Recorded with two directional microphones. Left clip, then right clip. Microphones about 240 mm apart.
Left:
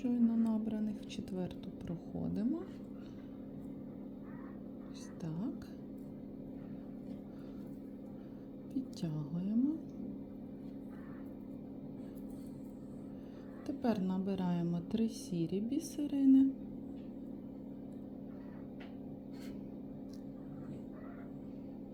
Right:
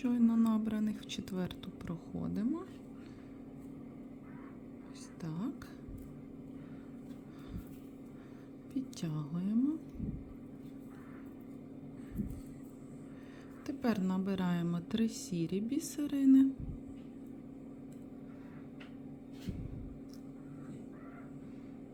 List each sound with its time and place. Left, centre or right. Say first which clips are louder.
0.0 s a sound: right 2 dB; centre
2.2 s a woman's voice: right 1 dB; centre
5.2 s speech: right 1 dB; centre
8.7 s a woman's voice: right 1 dB; centre
13.7 s a woman's voice: right 1 dB; centre